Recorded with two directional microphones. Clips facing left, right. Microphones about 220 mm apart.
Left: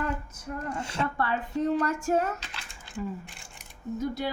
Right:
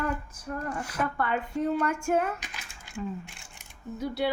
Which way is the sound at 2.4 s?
15° right (ahead or behind).